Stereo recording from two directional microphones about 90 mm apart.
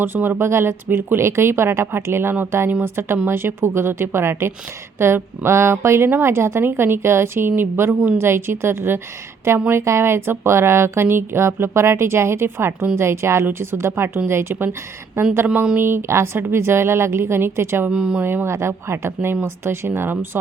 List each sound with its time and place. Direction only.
0.0 s a woman's voice: 20° right (ahead or behind)
15.4 s speech: 10° right (ahead or behind)
15.8 s a woman's voice: 25° right (ahead or behind)
17.9 s speech: 10° right (ahead or behind)
18.2 s a woman's voice: 25° right (ahead or behind)